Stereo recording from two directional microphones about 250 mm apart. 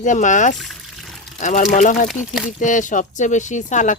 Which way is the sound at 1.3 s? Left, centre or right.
Left.